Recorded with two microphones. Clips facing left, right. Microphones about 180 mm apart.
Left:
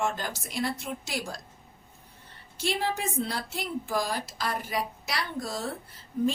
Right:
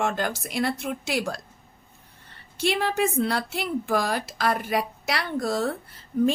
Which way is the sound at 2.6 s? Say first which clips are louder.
Right 6 dB; 65° right (ahead or behind).